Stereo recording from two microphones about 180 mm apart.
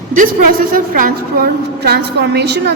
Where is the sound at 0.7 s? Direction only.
50° right (ahead or behind).